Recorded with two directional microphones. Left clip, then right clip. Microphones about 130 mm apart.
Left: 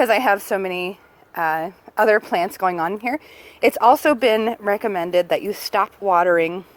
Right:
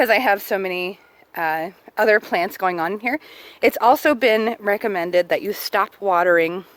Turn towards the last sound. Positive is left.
turn(degrees=-50)  # may be behind; listen again after turning